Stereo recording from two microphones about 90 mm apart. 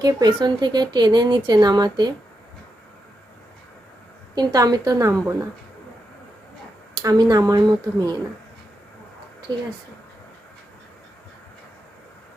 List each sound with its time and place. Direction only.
0.0 s speech: 45° right (ahead or behind)
4.4 s a woman's voice: 45° right (ahead or behind)
7.0 s speech: 45° right (ahead or behind)